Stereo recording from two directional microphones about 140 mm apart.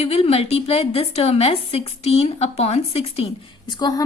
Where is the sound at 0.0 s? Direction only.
45° left (ahead or behind).